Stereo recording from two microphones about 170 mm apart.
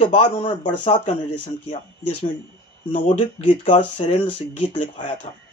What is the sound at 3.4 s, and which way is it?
Speech, 30° left (ahead or behind).